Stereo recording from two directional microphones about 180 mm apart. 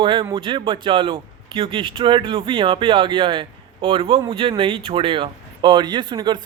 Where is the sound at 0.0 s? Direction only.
30° right (ahead or behind).